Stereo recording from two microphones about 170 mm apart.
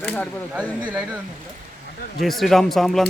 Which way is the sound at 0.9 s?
5° right (ahead or behind).